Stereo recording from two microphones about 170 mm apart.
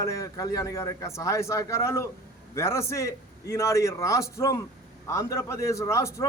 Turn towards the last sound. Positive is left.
turn(degrees=15)  # may be behind; listen again after turning